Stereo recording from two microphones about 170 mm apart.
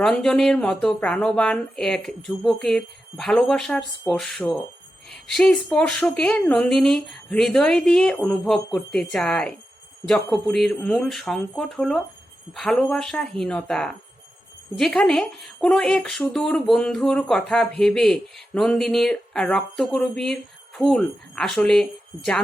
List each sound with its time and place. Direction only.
0.0 s speech: 5° left (ahead or behind)